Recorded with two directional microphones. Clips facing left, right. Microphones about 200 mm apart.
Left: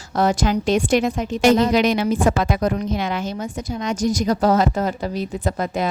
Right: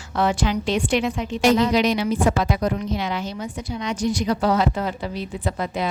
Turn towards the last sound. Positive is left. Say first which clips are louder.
# left 3 dB
turn(degrees=45)  # may be behind; listen again after turning